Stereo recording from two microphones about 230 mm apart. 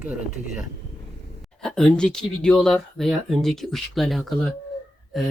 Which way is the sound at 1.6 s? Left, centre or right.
Centre.